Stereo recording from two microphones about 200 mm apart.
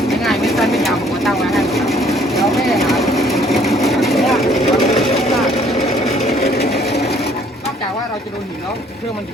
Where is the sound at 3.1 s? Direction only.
Centre (ahead or behind).